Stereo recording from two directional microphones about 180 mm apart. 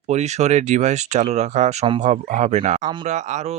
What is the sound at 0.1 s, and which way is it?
Speech, 40° right (ahead or behind).